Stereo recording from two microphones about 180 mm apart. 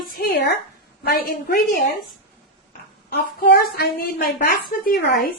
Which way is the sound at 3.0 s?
60° left (ahead or behind).